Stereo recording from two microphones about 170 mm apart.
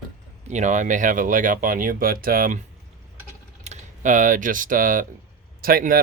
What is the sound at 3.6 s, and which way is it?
Speech, 50° right (ahead or behind).